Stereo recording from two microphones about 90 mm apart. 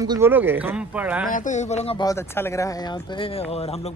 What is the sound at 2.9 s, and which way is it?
Speech, 65° left (ahead or behind).